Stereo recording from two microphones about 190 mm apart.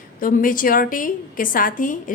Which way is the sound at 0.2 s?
45° left (ahead or behind).